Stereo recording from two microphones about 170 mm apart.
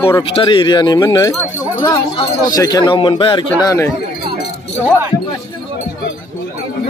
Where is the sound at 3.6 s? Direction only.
20° left (ahead or behind).